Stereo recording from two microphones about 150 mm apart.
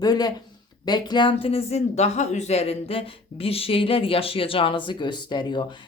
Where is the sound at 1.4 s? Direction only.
45° left (ahead or behind).